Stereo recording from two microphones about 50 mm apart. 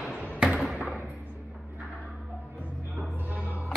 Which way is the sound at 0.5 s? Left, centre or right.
Centre.